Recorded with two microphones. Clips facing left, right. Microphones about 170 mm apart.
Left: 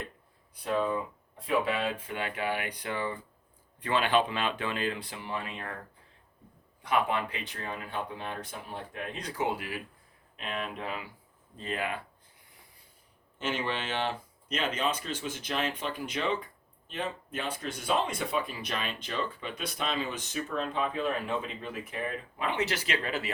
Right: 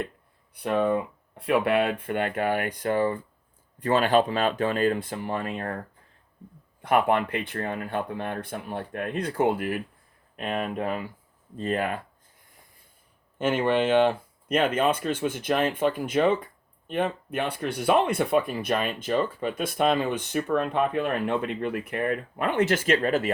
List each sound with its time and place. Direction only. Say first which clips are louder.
0.5 s speech: right 6 dB; 65° right (ahead or behind); by 5.8 s 45° right (ahead or behind)
6.8 s speech: right 6 dB; 55° right (ahead or behind)
13.4 s speech: right 10 dB; 55° right (ahead or behind)